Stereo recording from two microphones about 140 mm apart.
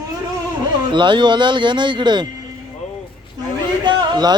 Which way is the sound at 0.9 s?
35° right (ahead or behind).